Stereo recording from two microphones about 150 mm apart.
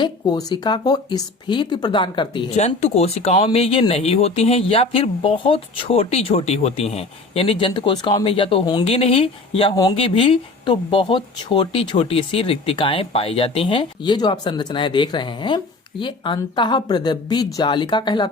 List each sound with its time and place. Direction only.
0.0 s speech: 25° left (ahead or behind)
2.6 s speech: 45° left (ahead or behind); by 18.3 s 30° left (ahead or behind)